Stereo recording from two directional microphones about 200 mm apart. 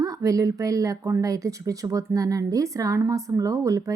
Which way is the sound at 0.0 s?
15° right (ahead or behind).